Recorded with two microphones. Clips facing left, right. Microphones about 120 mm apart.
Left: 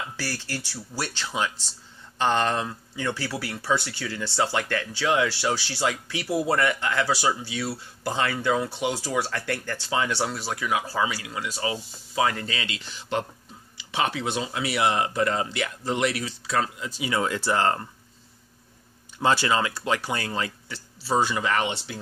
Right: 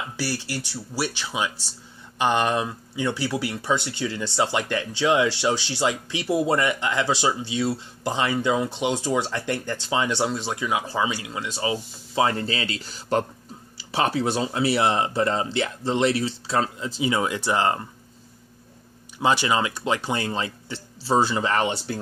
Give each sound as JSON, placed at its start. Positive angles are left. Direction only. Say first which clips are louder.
{"t": 0.2, "sound": "speech", "louder": "right 7 dB", "side_deg": -15}
{"t": 19.2, "sound": "speech", "louder": "right 1 dB", "side_deg": -15}